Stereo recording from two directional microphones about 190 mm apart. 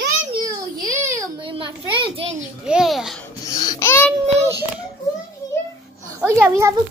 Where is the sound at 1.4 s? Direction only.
25° right (ahead or behind).